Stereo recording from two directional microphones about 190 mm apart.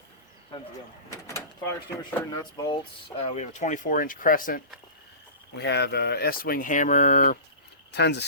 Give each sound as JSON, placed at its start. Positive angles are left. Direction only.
{"t": 1.1, "sound": "speech", "side_deg": 15}
{"t": 3.2, "sound": "speech", "side_deg": 40}
{"t": 5.5, "sound": "speech", "side_deg": 65}
{"t": 7.9, "sound": "speech", "side_deg": 65}